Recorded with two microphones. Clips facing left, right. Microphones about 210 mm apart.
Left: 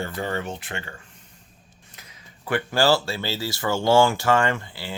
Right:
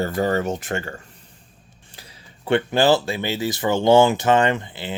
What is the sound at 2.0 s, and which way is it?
Speech, 30° right (ahead or behind).